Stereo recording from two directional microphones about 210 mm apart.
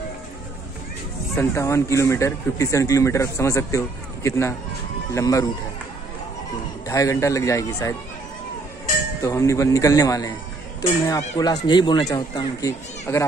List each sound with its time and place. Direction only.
1.4 s a man's voice: 10° left (ahead or behind)
6.9 s a man's voice: 15° left (ahead or behind)
9.2 s a man's voice: 15° left (ahead or behind)